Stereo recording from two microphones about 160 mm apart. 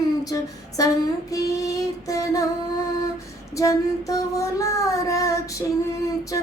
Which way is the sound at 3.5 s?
20° left (ahead or behind).